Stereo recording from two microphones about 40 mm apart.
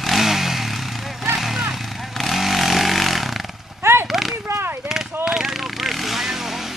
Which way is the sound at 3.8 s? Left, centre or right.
Right.